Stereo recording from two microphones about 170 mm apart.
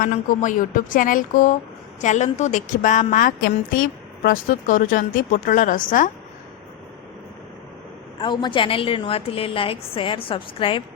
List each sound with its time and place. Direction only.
0.0 s speech: 50° left (ahead or behind)
8.2 s a woman's voice: 30° left (ahead or behind)